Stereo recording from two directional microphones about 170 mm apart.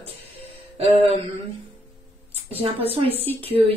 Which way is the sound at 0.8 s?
35° right (ahead or behind).